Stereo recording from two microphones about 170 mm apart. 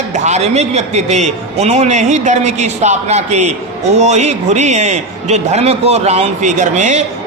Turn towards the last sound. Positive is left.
turn(degrees=-45)  # may be behind; listen again after turning